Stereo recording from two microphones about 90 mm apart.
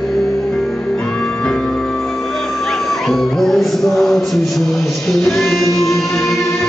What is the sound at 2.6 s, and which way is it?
Music, 5° left (ahead or behind).